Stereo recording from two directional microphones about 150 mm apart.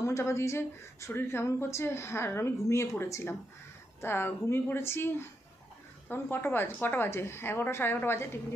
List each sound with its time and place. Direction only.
0.0 s speech: 20° left (ahead or behind)